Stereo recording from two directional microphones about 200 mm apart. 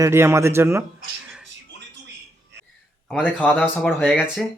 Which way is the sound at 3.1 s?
5° right (ahead or behind).